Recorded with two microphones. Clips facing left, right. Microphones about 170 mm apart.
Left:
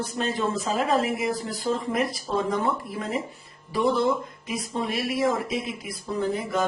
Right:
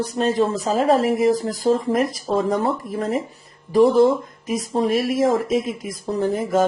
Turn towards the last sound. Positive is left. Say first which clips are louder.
# right 6 dB
turn(degrees=-45)  # may be behind; listen again after turning